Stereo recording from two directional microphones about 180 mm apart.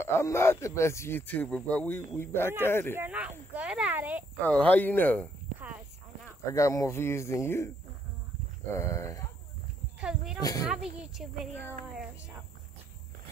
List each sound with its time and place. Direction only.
0.0 s speech: 15° left (ahead or behind)
3.0 s speech: 10° right (ahead or behind)
4.4 s speech: 10° left (ahead or behind)
6.5 s speech: 20° left (ahead or behind)
8.7 s speech: 15° left (ahead or behind)
9.9 s speech: 5° right (ahead or behind)